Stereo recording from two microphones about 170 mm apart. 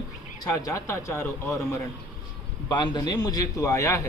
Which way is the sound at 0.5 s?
20° left (ahead or behind).